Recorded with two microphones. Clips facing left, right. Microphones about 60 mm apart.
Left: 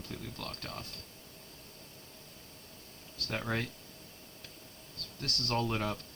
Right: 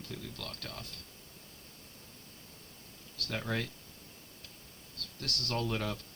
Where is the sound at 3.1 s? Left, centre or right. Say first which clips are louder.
Left 1 dB; left.